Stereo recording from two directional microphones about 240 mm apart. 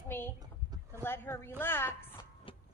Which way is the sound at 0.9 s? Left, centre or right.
Centre.